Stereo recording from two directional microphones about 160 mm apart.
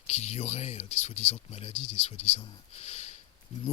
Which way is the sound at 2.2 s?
40° left (ahead or behind).